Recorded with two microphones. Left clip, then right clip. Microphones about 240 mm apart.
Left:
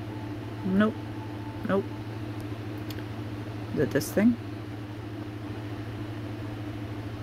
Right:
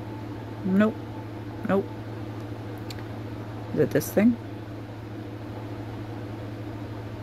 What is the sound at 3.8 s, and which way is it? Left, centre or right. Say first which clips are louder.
Speech: right 2 dB; centre.